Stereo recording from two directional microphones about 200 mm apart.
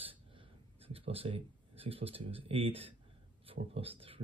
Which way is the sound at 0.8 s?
30° right (ahead or behind).